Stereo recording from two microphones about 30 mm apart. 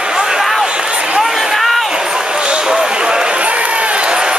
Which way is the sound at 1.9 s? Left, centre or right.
Right.